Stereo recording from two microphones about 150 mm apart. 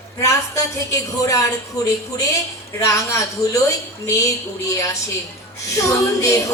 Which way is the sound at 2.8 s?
20° left (ahead or behind).